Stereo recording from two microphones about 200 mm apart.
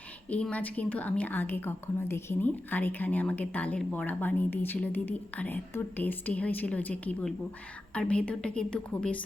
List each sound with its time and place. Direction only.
0.3 s a woman's voice: 5° left (ahead or behind)